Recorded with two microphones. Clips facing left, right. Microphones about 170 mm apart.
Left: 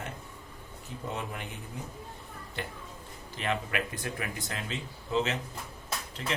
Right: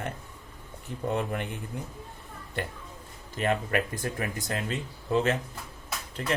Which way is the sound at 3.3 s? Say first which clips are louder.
Right 5 dB; 45° right (ahead or behind).